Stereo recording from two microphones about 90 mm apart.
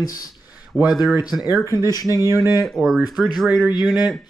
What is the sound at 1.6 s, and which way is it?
Speech, 40° left (ahead or behind).